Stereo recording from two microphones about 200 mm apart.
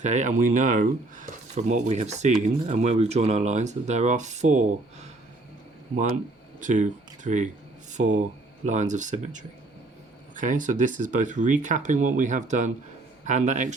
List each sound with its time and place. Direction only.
0.0 s speech: 35° right (ahead or behind)
6.6 s speech: 40° right (ahead or behind)